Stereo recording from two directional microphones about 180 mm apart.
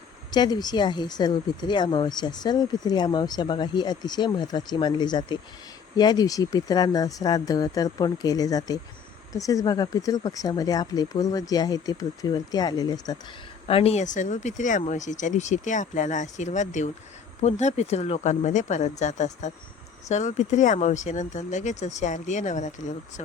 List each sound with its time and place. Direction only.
0.3 s speech: 25° left (ahead or behind)
13.7 s speech: 30° left (ahead or behind)